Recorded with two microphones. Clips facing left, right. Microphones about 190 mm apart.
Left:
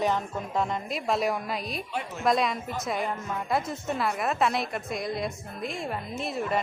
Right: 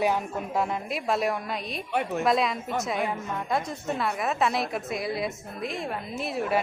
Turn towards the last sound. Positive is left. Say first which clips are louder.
# right 2 dB
turn(degrees=-5)  # may be behind; listen again after turning